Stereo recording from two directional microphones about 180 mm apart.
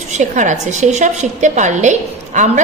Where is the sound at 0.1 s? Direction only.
40° right (ahead or behind).